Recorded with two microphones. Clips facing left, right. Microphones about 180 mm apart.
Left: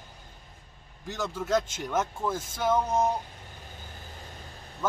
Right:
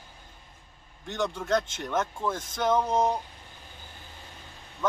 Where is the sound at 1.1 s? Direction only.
5° left (ahead or behind).